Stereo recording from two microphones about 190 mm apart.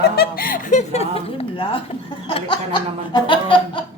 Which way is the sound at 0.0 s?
50° left (ahead or behind).